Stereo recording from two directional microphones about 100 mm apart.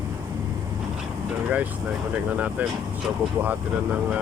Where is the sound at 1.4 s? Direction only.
15° right (ahead or behind).